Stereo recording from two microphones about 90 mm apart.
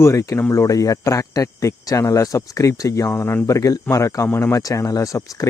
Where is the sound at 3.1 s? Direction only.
25° left (ahead or behind).